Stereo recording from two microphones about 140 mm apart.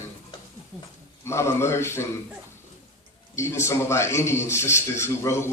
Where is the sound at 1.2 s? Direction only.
20° left (ahead or behind).